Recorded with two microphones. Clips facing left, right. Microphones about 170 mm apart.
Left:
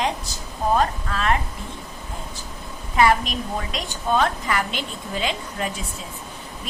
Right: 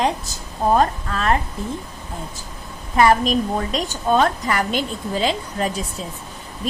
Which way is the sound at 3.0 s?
40° right (ahead or behind).